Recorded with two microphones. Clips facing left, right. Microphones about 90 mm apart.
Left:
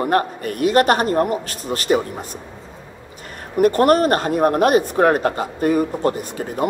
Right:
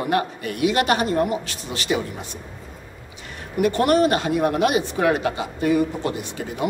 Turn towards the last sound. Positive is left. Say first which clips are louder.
# left 4 dB
turn(degrees=45)  # may be behind; listen again after turning